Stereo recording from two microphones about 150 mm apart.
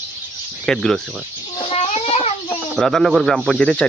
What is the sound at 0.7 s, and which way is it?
Speech, 5° left (ahead or behind).